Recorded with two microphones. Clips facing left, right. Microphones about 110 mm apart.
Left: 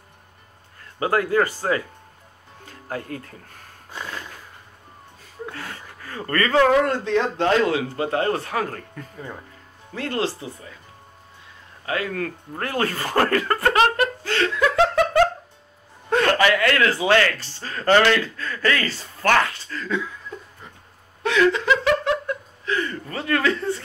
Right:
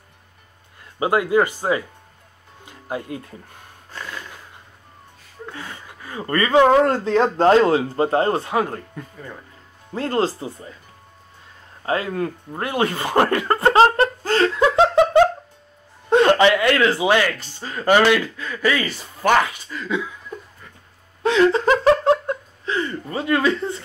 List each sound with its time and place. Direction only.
0.9 s speech: 20° right (ahead or behind)
3.9 s a sound: 15° left (ahead or behind)
5.5 s a sound: 15° right (ahead or behind)
6.7 s speech: 35° right (ahead or behind)
9.9 s speech: 35° right (ahead or behind)
11.8 s speech: 30° right (ahead or behind)
21.2 s laughter: 30° right (ahead or behind)